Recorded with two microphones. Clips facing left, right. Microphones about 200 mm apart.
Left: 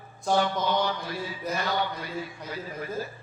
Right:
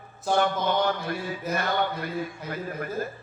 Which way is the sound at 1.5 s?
55° right (ahead or behind).